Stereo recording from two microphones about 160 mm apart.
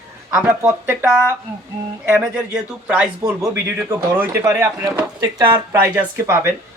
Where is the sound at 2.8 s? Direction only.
10° right (ahead or behind).